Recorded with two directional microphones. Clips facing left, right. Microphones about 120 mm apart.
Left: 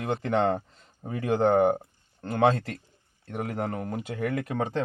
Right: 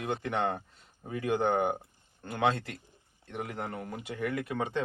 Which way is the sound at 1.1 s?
45° left (ahead or behind).